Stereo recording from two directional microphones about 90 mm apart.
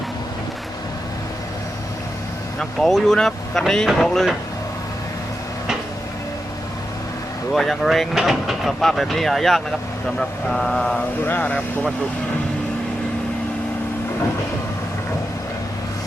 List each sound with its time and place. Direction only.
2.6 s speech: 5° left (ahead or behind)
7.5 s speech: 5° left (ahead or behind)
10.2 s mantra: 10° left (ahead or behind)
11.2 s speech: 20° left (ahead or behind)